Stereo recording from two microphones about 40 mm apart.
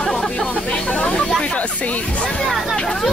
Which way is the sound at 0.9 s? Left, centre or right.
Left.